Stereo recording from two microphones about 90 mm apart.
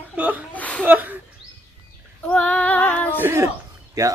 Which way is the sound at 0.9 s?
20° right (ahead or behind).